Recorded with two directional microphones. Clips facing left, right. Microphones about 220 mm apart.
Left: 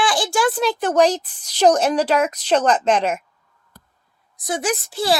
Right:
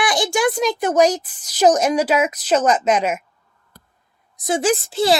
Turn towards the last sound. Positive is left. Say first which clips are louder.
# right 4 dB
turn(degrees=-25)  # may be behind; listen again after turning